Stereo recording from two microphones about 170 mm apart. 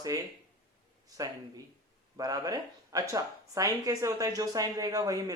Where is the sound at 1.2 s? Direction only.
20° right (ahead or behind).